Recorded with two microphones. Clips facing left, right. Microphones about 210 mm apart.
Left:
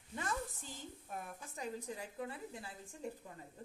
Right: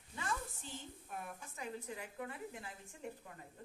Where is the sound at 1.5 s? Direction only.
35° left (ahead or behind).